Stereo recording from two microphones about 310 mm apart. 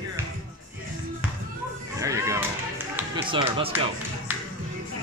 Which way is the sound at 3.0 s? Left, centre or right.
Centre.